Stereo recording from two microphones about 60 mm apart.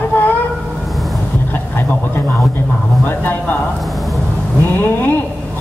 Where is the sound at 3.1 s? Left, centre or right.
Left.